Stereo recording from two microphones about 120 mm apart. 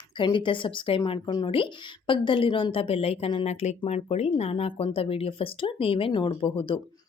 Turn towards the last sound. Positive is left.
turn(degrees=45)  # may be behind; listen again after turning